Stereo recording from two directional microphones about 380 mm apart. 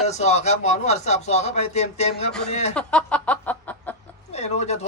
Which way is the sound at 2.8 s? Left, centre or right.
Centre.